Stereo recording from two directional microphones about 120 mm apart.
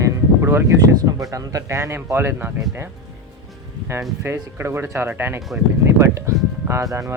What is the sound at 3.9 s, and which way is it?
Speech, 25° right (ahead or behind).